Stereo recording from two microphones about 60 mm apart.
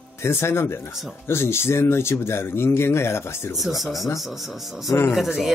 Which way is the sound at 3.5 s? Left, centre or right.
Centre.